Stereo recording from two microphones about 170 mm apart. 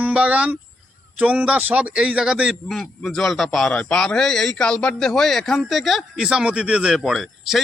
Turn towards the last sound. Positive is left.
turn(degrees=0)  # may be behind; listen again after turning